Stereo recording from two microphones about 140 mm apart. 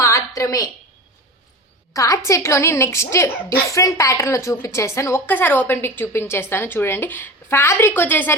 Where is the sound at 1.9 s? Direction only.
25° left (ahead or behind).